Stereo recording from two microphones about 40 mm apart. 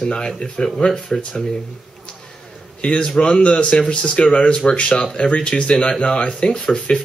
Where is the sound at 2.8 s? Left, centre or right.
Left.